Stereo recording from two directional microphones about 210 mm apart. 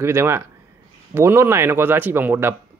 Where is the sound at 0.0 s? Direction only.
10° right (ahead or behind).